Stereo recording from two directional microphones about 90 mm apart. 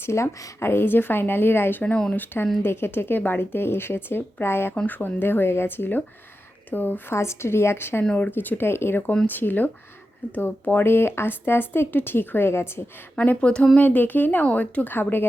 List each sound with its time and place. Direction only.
0.0 s speech: 30° left (ahead or behind)
1.8 s speech: 10° left (ahead or behind)
8.0 s speech: 15° left (ahead or behind)
13.1 s speech: 15° left (ahead or behind)